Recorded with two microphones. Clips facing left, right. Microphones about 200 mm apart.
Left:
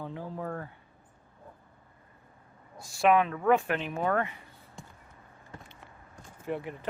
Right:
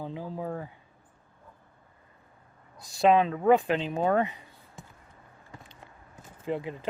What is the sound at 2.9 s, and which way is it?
Speech, 20° right (ahead or behind).